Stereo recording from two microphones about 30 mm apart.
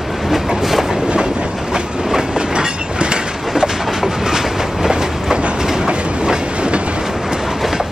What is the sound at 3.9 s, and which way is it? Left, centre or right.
Train, centre.